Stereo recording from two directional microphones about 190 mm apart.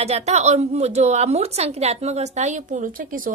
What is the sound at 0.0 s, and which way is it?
A woman's voice, 35° right (ahead or behind).